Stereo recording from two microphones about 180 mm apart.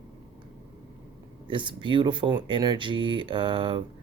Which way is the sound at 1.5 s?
25° right (ahead or behind).